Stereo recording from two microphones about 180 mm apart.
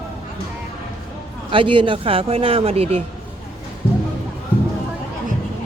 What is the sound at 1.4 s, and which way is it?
Speech, 30° right (ahead or behind).